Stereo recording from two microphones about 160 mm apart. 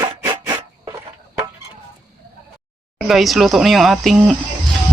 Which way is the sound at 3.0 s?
Centre (ahead or behind).